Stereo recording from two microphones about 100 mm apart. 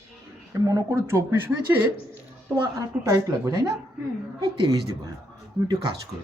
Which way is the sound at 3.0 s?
40° right (ahead or behind).